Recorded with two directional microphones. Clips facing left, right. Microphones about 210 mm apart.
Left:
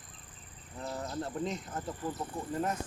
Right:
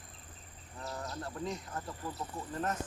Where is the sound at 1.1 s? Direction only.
20° left (ahead or behind).